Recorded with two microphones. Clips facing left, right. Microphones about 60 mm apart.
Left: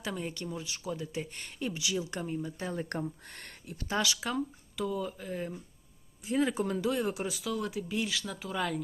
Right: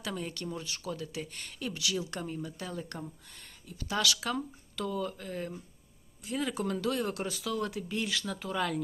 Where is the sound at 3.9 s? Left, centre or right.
Left.